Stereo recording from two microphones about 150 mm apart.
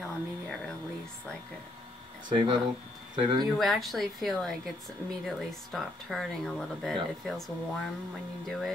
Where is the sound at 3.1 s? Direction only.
35° right (ahead or behind).